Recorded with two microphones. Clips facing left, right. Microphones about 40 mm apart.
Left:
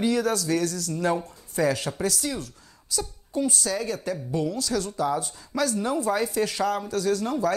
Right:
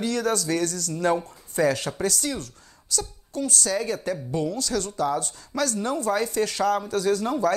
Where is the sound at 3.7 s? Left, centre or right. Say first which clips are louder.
Right 2 dB; centre.